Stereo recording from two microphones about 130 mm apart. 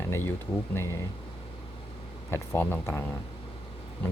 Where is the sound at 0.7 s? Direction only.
20° left (ahead or behind).